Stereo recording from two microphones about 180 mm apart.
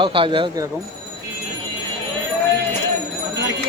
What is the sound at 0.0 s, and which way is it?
Speech, 30° right (ahead or behind).